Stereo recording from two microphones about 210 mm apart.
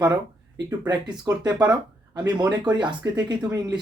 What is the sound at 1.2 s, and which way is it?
Speech, 15° right (ahead or behind).